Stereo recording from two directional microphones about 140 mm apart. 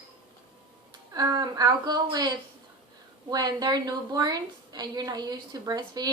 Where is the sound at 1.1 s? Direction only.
25° right (ahead or behind).